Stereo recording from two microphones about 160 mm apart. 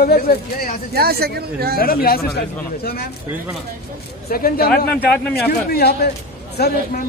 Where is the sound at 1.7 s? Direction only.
65° left (ahead or behind).